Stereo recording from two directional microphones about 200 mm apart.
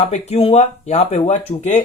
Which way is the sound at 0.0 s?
30° left (ahead or behind).